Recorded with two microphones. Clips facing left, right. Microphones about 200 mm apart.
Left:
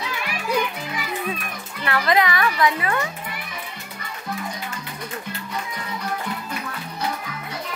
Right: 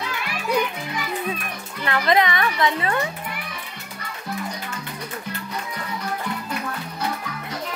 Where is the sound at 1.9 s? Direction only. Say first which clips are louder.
Even; 20° right (ahead or behind).